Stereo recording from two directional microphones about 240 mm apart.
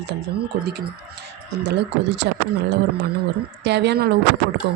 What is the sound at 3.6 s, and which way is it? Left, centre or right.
Speech, right.